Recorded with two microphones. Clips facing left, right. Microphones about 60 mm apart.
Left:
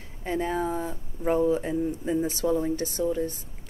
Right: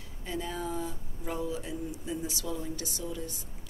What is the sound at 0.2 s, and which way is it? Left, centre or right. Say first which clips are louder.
Speech: left 8 dB; left.